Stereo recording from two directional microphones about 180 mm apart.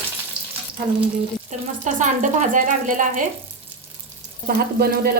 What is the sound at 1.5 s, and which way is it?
Speech, 45° right (ahead or behind).